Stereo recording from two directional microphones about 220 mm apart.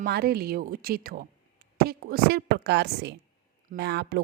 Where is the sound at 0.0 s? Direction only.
45° right (ahead or behind).